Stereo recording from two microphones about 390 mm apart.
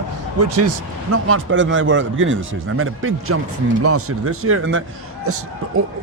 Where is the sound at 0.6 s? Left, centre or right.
Right.